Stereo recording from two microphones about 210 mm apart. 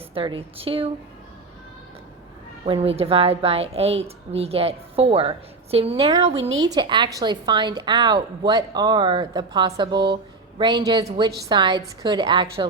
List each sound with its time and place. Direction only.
0.1 s a woman's voice: 25° right (ahead or behind)
2.6 s a woman's voice: 25° right (ahead or behind)
6.5 s a woman's voice: 65° right (ahead or behind)
6.7 s a woman's voice: 20° right (ahead or behind)